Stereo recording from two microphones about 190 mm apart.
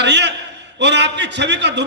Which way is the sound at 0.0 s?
65° right (ahead or behind).